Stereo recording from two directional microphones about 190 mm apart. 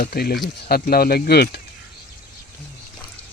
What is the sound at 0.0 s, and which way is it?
Speech, 50° left (ahead or behind).